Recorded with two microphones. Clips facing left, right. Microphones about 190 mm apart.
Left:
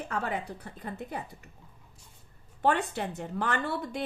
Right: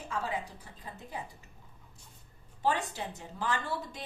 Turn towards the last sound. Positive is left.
turn(degrees=60)  # may be behind; listen again after turning